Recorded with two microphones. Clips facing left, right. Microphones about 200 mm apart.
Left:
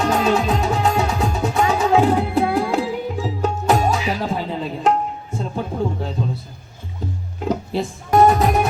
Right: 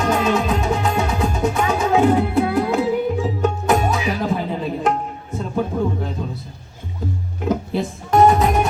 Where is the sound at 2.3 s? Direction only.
30° left (ahead or behind).